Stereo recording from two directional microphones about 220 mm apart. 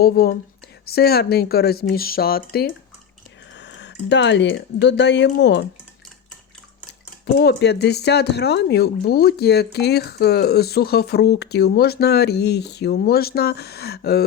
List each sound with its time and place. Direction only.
0.0 s speech: 45° left (ahead or behind)
7.3 s speech: 50° left (ahead or behind)